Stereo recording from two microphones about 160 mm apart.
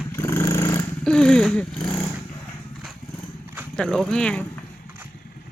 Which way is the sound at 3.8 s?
5° left (ahead or behind).